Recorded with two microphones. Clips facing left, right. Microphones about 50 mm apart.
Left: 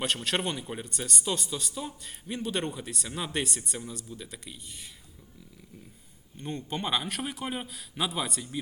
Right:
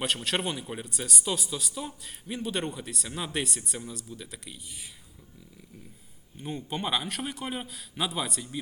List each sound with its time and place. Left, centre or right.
0.0 s a man's voice: centre
6.4 s a man's voice: centre